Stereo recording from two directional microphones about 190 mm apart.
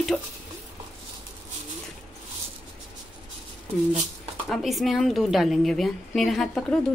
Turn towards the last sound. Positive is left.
turn(degrees=0)  # may be behind; listen again after turning